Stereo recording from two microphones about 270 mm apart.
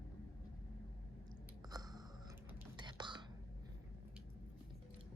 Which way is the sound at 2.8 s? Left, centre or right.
Centre.